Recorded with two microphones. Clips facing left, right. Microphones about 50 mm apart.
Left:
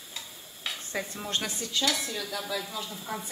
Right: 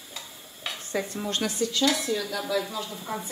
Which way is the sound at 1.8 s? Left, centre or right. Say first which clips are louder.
Right 5 dB; centre.